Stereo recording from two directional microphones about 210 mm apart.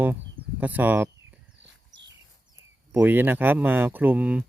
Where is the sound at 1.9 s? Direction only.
60° right (ahead or behind).